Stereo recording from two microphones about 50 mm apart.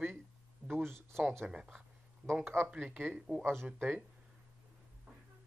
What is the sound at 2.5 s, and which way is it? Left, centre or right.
Speech, right.